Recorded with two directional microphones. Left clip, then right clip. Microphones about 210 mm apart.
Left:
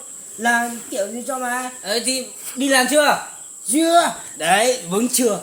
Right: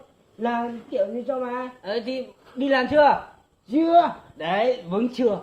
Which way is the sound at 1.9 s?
20° left (ahead or behind).